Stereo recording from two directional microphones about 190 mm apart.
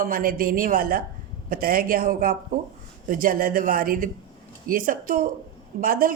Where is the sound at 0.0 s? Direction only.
50° right (ahead or behind).